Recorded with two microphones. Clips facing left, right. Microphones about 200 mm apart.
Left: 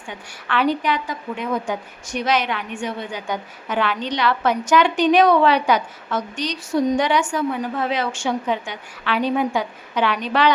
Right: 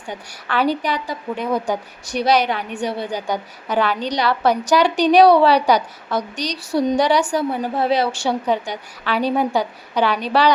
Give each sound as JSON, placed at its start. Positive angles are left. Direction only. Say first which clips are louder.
{"t": 0.1, "sound": "a woman's voice", "louder": "right 1 dB", "side_deg": -40}